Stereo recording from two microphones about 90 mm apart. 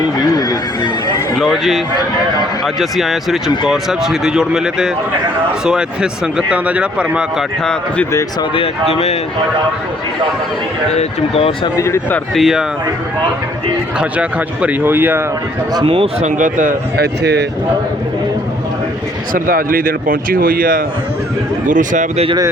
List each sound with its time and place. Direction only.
0.2 s a sound: 50° left (ahead or behind)
1.4 s speech: centre (ahead or behind)
7.6 s speech: 10° left (ahead or behind)
11.3 s speech: 90° left
12.3 s speech: centre (ahead or behind)
14.0 s speech: 15° right (ahead or behind)
15.8 s speech: 90° right